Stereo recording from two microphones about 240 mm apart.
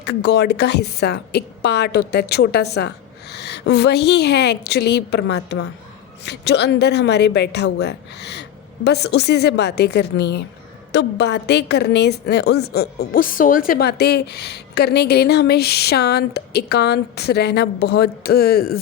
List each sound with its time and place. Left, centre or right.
0.0 s a woman's voice: left